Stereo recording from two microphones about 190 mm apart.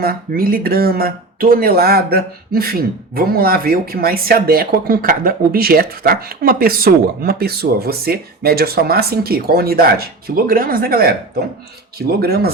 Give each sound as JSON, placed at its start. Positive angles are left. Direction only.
{"t": 0.0, "sound": "speech", "side_deg": -50}